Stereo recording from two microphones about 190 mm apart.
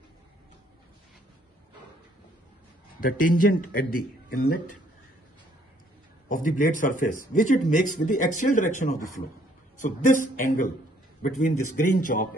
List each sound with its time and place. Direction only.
3.0 s speech: 45° left (ahead or behind)
6.2 s speech: 45° left (ahead or behind)